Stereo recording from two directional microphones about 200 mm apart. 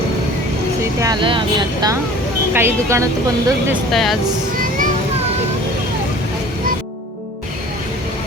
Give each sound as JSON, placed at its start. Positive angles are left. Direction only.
{"t": 1.0, "sound": "speech", "side_deg": -25}
{"t": 3.7, "sound": "speech", "side_deg": 0}
{"t": 4.5, "sound": "children playing", "side_deg": -45}